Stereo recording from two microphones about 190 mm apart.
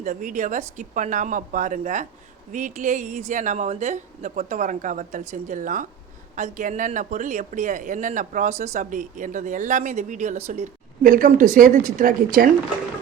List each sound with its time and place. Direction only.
0.0 s speech: 40° right (ahead or behind)